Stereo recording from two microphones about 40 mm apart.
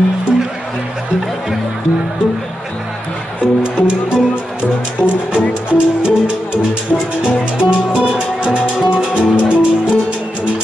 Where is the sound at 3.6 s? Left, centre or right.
Right.